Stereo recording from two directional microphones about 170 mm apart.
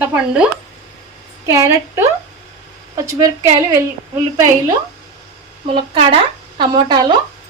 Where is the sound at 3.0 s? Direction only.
20° right (ahead or behind).